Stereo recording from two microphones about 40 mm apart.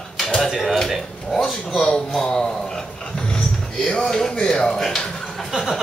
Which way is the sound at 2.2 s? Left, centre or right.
Centre.